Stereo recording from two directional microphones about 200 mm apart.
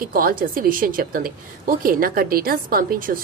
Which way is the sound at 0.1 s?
45° right (ahead or behind).